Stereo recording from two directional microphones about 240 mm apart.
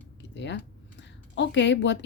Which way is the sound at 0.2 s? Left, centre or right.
Left.